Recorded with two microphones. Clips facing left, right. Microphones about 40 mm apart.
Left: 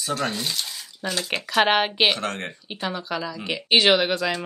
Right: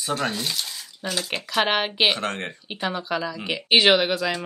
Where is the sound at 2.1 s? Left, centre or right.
Right.